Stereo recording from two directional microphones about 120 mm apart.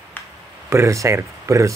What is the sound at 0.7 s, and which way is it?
Speech, 25° right (ahead or behind).